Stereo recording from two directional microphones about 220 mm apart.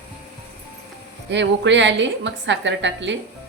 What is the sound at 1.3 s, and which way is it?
A woman's voice, 55° right (ahead or behind).